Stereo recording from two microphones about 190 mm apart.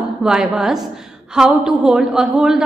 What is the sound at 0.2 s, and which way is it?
A woman's voice, 5° right (ahead or behind).